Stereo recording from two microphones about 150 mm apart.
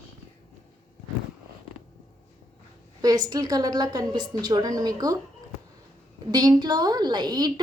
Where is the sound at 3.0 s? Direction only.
25° right (ahead or behind).